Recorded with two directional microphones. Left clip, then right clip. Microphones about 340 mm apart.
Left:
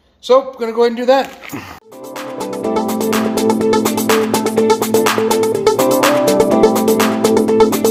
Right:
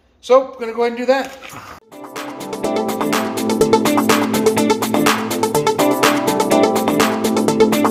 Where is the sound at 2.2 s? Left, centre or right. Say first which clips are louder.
Left 3 dB; centre.